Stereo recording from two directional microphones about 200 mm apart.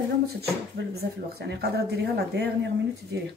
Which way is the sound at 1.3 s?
55° right (ahead or behind).